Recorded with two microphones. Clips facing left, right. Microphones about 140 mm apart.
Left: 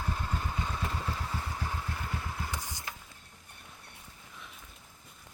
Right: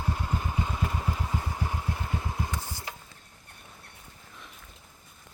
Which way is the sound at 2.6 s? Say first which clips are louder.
Right 3 dB; 15° left (ahead or behind).